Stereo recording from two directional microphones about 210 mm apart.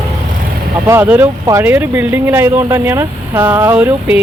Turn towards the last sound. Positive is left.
turn(degrees=-5)  # may be behind; listen again after turning